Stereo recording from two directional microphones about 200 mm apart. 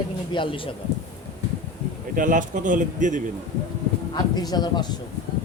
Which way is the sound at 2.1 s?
40° right (ahead or behind).